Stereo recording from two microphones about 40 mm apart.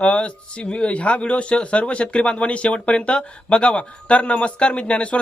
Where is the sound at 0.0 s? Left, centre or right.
Left.